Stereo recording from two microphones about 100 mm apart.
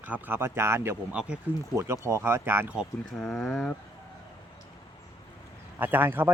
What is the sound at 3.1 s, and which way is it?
Speech, 5° left (ahead or behind).